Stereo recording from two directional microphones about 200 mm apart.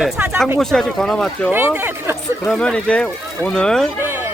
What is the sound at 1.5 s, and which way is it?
Speech, 10° right (ahead or behind).